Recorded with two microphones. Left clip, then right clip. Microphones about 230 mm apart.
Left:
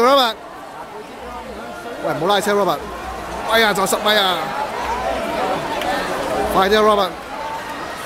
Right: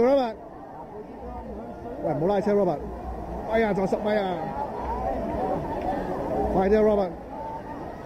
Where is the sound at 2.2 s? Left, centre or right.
Left.